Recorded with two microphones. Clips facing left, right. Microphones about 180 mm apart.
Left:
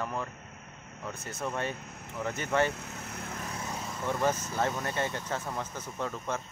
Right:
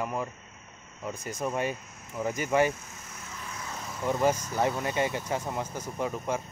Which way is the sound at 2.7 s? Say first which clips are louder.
Even; 65° left (ahead or behind).